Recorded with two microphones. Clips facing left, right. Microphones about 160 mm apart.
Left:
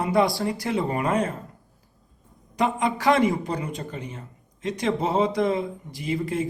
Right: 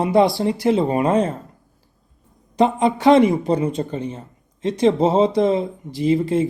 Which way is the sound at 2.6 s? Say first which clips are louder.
Right 7 dB; 25° right (ahead or behind).